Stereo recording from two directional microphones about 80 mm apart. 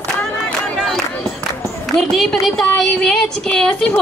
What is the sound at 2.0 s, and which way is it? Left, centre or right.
Speech, centre.